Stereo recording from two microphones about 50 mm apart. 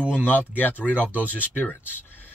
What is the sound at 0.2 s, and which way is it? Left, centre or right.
Speech, left.